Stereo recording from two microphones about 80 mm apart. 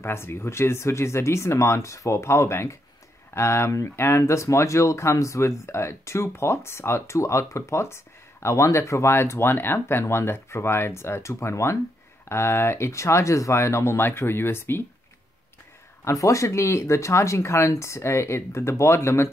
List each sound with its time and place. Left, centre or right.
0.0 s speech: left
16.0 s speech: left